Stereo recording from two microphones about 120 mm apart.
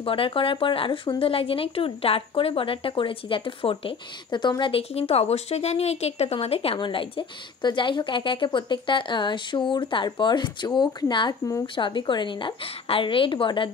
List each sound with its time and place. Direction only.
0.0 s speech: 50° left (ahead or behind)